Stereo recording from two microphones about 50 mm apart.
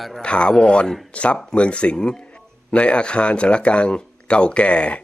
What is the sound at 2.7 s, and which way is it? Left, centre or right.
Speech, left.